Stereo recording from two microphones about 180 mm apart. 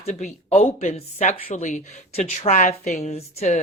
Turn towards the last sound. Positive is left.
turn(degrees=35)  # may be behind; listen again after turning